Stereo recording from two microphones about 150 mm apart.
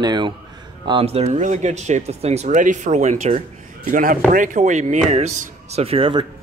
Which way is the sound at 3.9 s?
65° right (ahead or behind).